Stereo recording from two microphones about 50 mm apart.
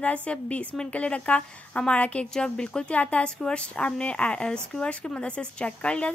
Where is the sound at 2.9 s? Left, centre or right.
Left.